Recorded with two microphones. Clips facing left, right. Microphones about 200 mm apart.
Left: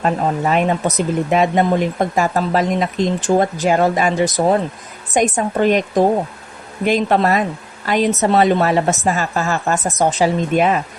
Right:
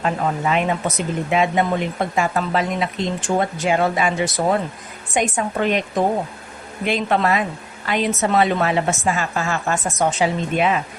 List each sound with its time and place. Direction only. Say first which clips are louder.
0.0 s speech: left 3 dB; 40° left (ahead or behind)